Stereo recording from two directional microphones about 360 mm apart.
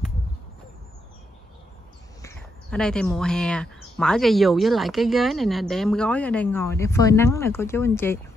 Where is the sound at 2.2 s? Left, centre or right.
Centre.